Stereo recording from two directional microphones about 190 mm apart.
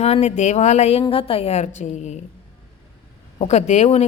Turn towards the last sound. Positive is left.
turn(degrees=35)  # may be behind; listen again after turning